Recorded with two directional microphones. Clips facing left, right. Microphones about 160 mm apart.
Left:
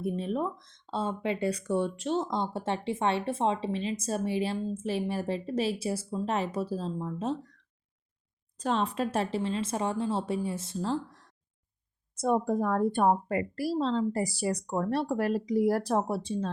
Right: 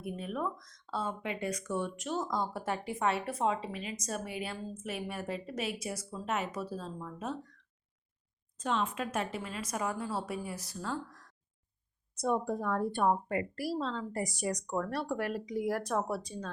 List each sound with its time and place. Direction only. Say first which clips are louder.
0.0 s speech: left 6 dB; 30° left (ahead or behind)
8.5 s speech: left 4 dB; 35° left (ahead or behind)
12.1 s a woman's voice: left 5 dB; 45° left (ahead or behind); by 16.5 s 30° left (ahead or behind)